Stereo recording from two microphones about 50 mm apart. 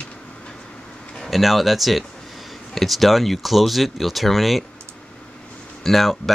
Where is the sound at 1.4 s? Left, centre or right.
Centre.